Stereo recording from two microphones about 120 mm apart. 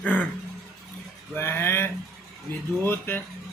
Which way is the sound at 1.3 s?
20° left (ahead or behind).